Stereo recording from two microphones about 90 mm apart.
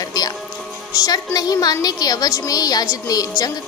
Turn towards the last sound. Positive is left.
turn(degrees=40)  # may be behind; listen again after turning